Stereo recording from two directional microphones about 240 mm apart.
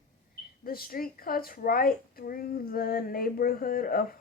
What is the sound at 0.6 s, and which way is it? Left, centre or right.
A woman's voice, left.